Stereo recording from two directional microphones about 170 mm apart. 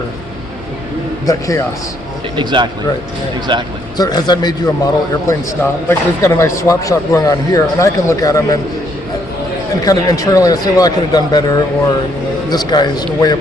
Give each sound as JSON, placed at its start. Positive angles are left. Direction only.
{"t": 1.3, "sound": "speech", "side_deg": 20}
{"t": 2.3, "sound": "speech", "side_deg": -25}
{"t": 3.9, "sound": "a man's voice", "side_deg": 25}
{"t": 9.8, "sound": "speech", "side_deg": 20}